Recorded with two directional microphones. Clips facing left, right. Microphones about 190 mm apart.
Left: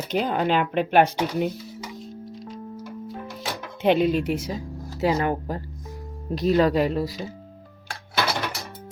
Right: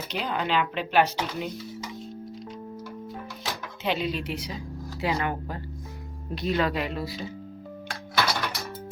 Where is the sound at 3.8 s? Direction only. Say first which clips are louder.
Left 9 dB; 55° left (ahead or behind).